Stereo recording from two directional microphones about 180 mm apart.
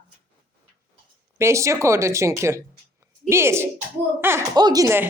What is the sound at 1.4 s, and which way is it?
A woman's voice, 15° right (ahead or behind).